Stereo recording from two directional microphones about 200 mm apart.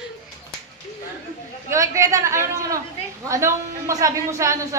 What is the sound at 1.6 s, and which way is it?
A man's voice, 15° right (ahead or behind).